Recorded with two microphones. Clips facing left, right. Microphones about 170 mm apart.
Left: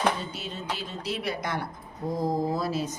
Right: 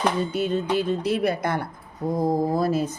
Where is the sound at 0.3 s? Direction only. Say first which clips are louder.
Right 12 dB; 55° right (ahead or behind).